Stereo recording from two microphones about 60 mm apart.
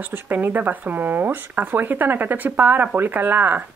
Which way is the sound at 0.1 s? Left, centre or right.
Right.